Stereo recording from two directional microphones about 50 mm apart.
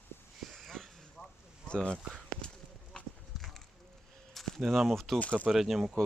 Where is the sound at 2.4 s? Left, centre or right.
Centre.